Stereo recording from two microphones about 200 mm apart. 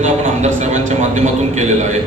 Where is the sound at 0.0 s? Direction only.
35° right (ahead or behind).